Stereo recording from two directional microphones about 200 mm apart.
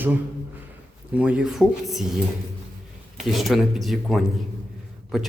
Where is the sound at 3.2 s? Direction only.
Centre (ahead or behind).